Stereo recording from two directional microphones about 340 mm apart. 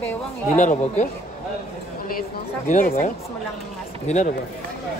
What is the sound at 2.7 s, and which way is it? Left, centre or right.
Speech, left.